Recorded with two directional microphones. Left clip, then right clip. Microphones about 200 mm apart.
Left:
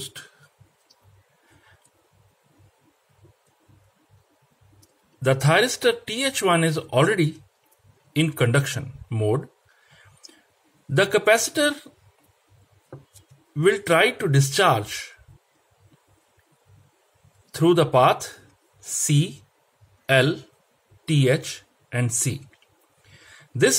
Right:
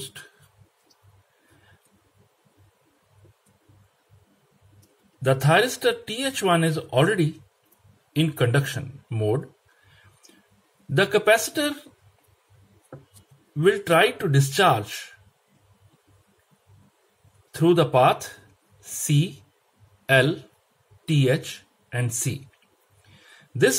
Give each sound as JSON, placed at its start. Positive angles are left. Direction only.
{"t": 0.0, "sound": "a sound", "side_deg": 20}
{"t": 5.2, "sound": "speech", "side_deg": 20}
{"t": 11.0, "sound": "speech", "side_deg": 20}
{"t": 13.6, "sound": "speech", "side_deg": 20}
{"t": 17.5, "sound": "speech", "side_deg": 20}
{"t": 23.1, "sound": "a sound", "side_deg": 20}